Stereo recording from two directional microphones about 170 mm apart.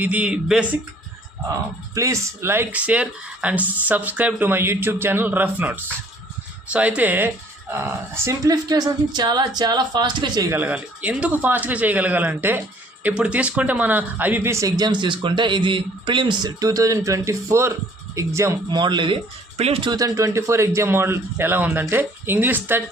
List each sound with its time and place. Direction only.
0.0 s speech: 10° right (ahead or behind)
2.0 s speech: 15° right (ahead or behind)